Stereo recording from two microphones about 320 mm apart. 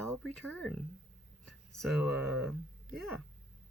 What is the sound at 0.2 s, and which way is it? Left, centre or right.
Speech, centre.